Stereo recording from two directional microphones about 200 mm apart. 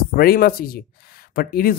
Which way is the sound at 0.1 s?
50° left (ahead or behind).